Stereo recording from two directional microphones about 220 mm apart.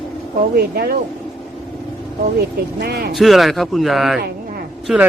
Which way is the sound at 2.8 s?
45° right (ahead or behind).